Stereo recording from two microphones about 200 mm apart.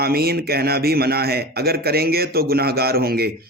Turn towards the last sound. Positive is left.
turn(degrees=-50)  # may be behind; listen again after turning